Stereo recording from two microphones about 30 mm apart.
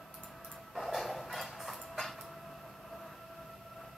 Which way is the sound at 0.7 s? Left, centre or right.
Centre.